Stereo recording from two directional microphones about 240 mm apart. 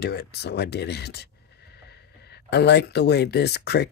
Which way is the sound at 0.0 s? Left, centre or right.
Left.